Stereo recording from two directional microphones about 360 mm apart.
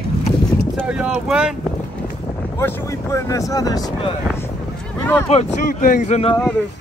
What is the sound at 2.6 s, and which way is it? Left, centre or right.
Speech, centre.